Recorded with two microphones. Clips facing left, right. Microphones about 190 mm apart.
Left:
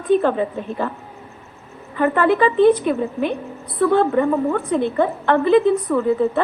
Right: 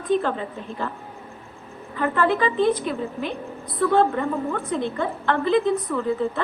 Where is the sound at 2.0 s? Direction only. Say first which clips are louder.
Left 5 dB; 55° left (ahead or behind).